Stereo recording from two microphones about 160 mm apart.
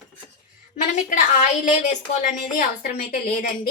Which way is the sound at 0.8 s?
50° left (ahead or behind).